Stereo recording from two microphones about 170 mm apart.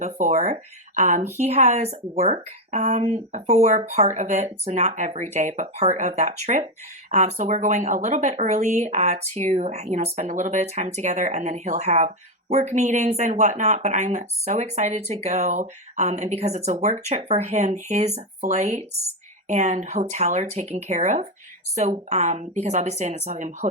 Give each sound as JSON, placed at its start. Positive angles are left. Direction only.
{"t": 0.0, "sound": "speech", "side_deg": -45}